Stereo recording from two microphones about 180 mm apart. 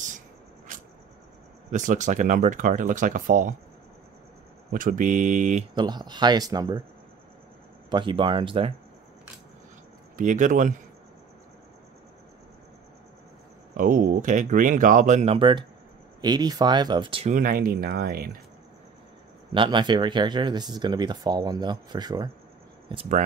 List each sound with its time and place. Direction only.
1.7 s speech: 45° right (ahead or behind)
4.7 s speech: 50° right (ahead or behind)
5.8 s speech: 25° right (ahead or behind)
7.9 s speech: 30° right (ahead or behind)
10.1 s speech: 45° right (ahead or behind)
13.7 s speech: 50° right (ahead or behind); by 17.3 s 30° right (ahead or behind)
17.3 s speech: 50° right (ahead or behind)
19.5 s speech: 25° right (ahead or behind)